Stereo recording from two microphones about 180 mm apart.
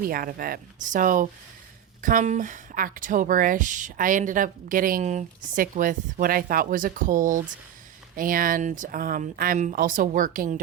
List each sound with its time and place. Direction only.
0.0 s speech: 55° right (ahead or behind)